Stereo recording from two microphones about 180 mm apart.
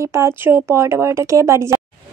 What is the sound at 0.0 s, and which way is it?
Speech, 15° right (ahead or behind).